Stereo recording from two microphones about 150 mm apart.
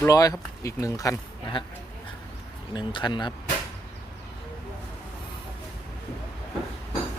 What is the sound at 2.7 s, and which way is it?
Speech, 30° left (ahead or behind).